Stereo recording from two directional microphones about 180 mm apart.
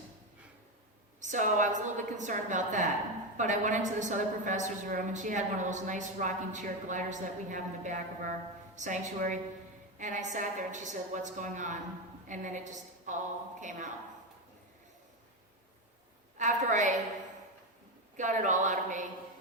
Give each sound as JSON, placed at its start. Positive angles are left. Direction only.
{"t": 1.2, "sound": "a woman's voice", "side_deg": -45}
{"t": 16.4, "sound": "a woman's voice", "side_deg": -45}
{"t": 18.2, "sound": "a woman's voice", "side_deg": -45}